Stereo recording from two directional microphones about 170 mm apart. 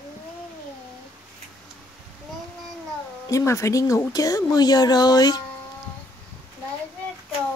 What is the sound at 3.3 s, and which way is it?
Speech, 15° left (ahead or behind).